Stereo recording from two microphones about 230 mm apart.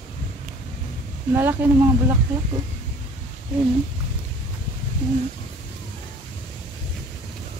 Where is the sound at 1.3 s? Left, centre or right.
Centre.